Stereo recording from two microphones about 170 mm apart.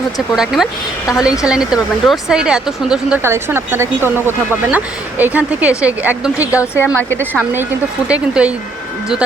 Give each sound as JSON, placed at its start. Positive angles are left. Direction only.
{"t": 0.3, "sound": "speech", "side_deg": 0}
{"t": 6.6, "sound": "a woman's voice", "side_deg": 15}
{"t": 7.2, "sound": "speech", "side_deg": -10}